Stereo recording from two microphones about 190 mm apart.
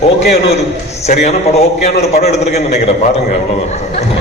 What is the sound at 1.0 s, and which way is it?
A man's voice, 35° left (ahead or behind).